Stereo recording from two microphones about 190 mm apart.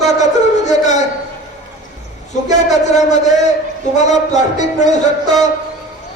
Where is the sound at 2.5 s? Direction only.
40° left (ahead or behind).